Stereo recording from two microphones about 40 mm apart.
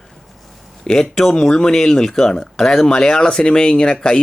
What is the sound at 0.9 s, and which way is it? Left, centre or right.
Speech, centre.